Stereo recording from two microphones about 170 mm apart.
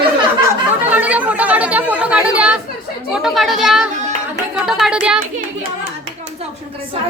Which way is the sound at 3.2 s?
Centre (ahead or behind).